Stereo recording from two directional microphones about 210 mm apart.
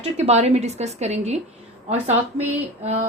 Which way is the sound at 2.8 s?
30° right (ahead or behind).